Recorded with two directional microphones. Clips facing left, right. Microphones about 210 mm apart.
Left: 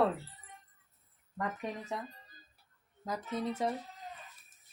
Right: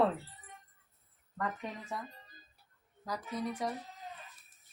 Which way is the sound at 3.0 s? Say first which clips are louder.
Left 2 dB; 25° left (ahead or behind).